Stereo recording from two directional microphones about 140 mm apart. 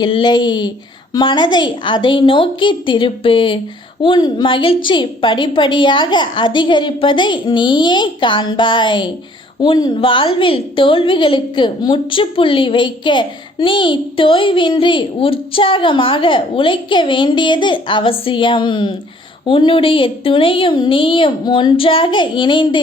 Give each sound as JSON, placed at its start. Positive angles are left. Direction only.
{"t": 0.0, "sound": "a woman's voice", "side_deg": 35}